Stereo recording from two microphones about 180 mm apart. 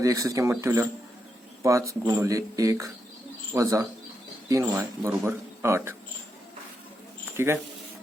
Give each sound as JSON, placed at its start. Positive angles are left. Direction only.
{"t": 0.0, "sound": "speech", "side_deg": -20}
{"t": 7.3, "sound": "speech", "side_deg": -15}